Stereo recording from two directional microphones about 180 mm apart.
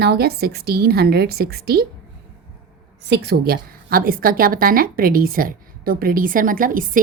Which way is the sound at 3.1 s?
60° right (ahead or behind).